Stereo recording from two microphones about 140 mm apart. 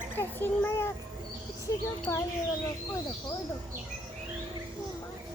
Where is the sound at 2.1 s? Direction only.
25° left (ahead or behind).